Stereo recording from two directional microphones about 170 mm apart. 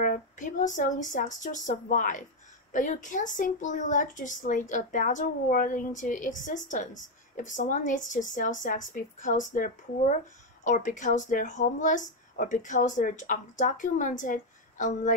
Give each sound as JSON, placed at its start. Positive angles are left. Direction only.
{"t": 0.0, "sound": "speech", "side_deg": 50}